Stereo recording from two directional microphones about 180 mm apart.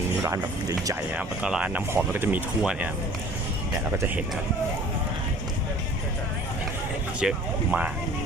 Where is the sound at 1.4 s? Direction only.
5° right (ahead or behind).